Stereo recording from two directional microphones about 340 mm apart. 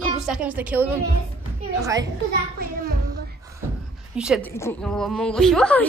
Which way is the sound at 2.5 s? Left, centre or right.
Right.